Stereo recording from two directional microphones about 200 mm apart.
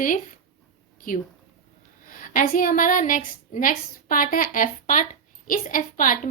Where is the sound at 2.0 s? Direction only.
45° left (ahead or behind).